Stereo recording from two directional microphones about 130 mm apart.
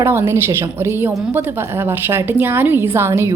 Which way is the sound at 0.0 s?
20° right (ahead or behind).